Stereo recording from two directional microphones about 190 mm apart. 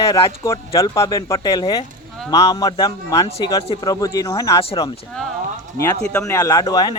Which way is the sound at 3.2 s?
30° left (ahead or behind).